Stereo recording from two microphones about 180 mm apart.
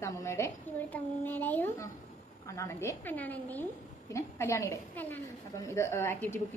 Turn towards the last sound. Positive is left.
turn(degrees=15)  # may be behind; listen again after turning